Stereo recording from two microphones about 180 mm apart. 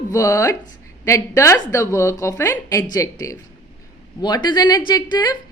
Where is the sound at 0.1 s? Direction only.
15° left (ahead or behind).